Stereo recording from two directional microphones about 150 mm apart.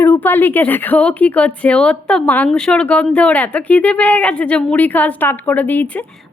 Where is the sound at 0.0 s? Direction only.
15° left (ahead or behind).